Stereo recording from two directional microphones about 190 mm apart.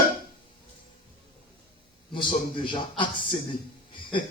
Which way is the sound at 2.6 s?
25° left (ahead or behind).